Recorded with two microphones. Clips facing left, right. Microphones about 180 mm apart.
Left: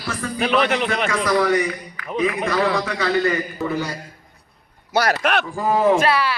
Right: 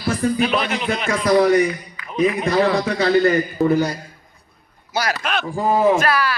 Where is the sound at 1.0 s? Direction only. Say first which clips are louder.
Right 5 dB; 35° right (ahead or behind).